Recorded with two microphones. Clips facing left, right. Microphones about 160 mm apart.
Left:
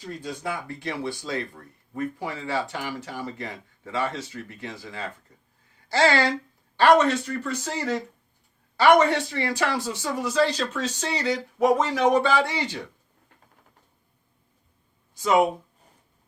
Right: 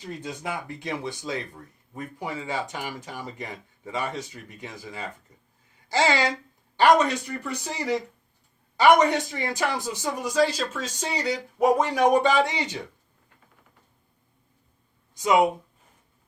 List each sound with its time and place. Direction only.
0.2 s speech: 20° right (ahead or behind)
15.1 s speech: 15° right (ahead or behind)